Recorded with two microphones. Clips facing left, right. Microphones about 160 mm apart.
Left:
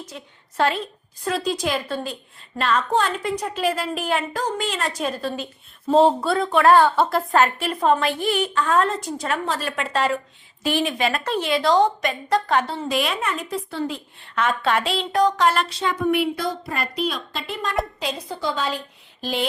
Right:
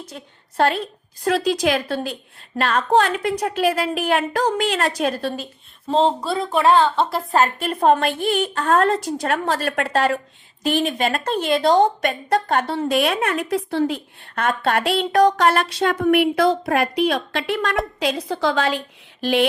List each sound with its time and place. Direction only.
0.5 s a woman's voice: 45° right (ahead or behind)
1.2 s a woman's voice: 85° right
2.6 s a woman's voice: 60° right (ahead or behind)
5.9 s speech: 5° left (ahead or behind)
7.3 s a woman's voice: 40° right (ahead or behind); by 14.4 s 65° right (ahead or behind)
14.4 s a woman's voice: 50° right (ahead or behind); by 18.8 s 85° right
19.2 s a woman's voice: 70° right (ahead or behind)